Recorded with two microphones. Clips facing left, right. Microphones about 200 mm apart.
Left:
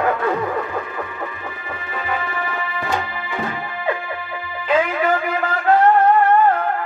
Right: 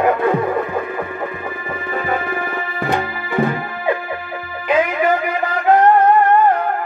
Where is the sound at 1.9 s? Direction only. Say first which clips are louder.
Right 4 dB; 50° right (ahead or behind).